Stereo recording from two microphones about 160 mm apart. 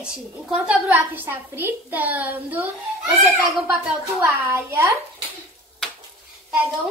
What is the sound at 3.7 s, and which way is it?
A woman's voice, 10° right (ahead or behind).